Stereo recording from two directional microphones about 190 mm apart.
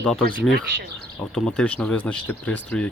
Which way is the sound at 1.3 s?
5° left (ahead or behind).